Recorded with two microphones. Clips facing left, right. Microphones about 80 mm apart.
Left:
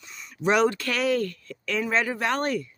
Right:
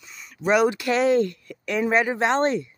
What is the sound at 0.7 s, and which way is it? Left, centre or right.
Speech, centre.